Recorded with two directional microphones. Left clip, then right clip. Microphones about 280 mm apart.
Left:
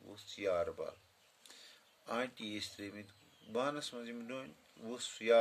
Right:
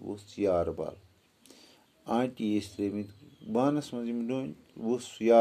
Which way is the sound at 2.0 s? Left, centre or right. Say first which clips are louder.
Right 9 dB; centre.